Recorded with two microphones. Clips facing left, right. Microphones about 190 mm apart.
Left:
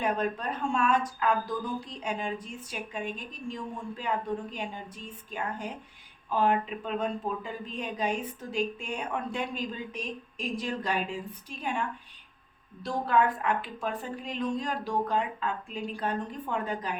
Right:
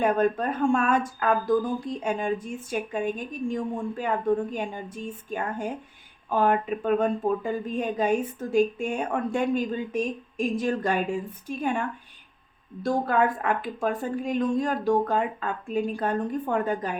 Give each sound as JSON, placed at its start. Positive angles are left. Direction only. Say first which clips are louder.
{"t": 0.0, "sound": "a woman's voice", "louder": "right 7 dB", "side_deg": -50}